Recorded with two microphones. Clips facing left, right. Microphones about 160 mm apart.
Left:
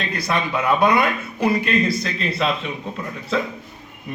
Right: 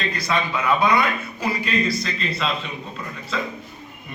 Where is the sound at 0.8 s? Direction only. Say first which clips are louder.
Left 2 dB; 55° left (ahead or behind).